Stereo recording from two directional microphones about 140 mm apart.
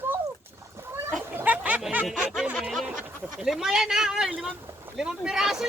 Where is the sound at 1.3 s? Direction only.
10° right (ahead or behind).